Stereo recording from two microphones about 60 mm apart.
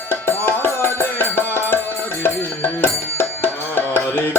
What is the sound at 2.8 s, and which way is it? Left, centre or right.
Music, left.